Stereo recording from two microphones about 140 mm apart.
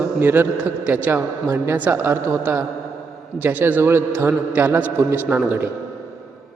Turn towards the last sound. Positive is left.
turn(degrees=-15)  # may be behind; listen again after turning